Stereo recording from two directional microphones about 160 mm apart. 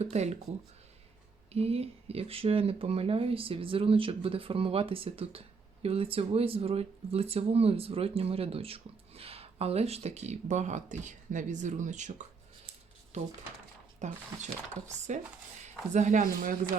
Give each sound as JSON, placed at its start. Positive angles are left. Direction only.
{"t": 0.0, "sound": "speech", "side_deg": -45}
{"t": 1.5, "sound": "speech", "side_deg": -40}
{"t": 14.0, "sound": "speech", "side_deg": -50}